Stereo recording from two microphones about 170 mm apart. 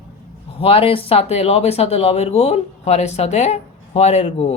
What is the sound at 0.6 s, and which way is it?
Speech, 35° left (ahead or behind).